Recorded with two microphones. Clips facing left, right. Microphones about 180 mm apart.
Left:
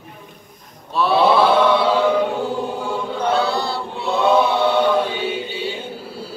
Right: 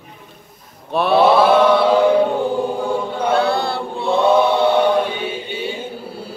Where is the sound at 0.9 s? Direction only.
55° right (ahead or behind).